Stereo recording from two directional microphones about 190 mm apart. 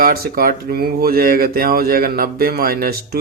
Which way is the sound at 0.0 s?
50° right (ahead or behind).